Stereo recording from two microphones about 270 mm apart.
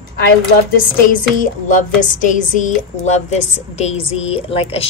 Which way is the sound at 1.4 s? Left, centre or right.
Left.